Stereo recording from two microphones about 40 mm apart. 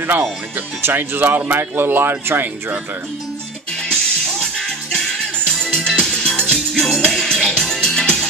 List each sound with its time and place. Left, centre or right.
0.8 s speech: right
3.9 s music: centre